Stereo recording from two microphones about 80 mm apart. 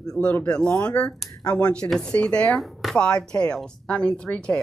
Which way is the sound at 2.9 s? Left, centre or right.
Centre.